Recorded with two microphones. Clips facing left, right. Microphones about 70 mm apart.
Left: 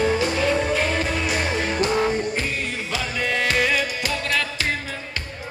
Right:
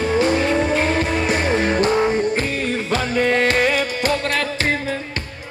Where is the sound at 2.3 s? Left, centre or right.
Right.